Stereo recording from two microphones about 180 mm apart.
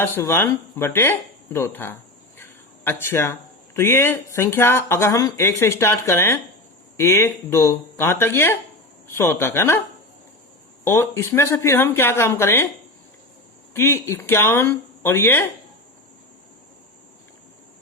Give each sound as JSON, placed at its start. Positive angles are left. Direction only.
{"t": 0.0, "sound": "speech", "side_deg": 15}
{"t": 2.4, "sound": "a sound", "side_deg": 10}
{"t": 3.8, "sound": "speech", "side_deg": 15}
{"t": 10.8, "sound": "speech", "side_deg": 15}
{"t": 13.7, "sound": "speech", "side_deg": 15}